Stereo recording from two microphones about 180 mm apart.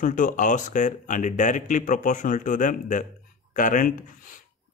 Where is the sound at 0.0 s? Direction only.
45° left (ahead or behind).